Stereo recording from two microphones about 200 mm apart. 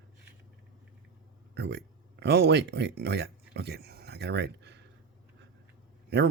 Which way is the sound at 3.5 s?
55° right (ahead or behind).